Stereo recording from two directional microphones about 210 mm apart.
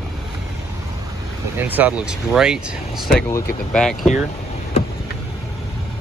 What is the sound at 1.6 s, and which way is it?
Speech, 10° right (ahead or behind).